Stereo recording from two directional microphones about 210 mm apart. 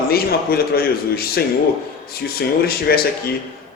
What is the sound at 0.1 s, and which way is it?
A man's voice, 45° left (ahead or behind).